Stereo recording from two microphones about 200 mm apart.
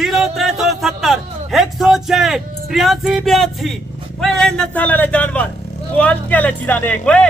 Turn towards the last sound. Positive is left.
turn(degrees=5)  # may be behind; listen again after turning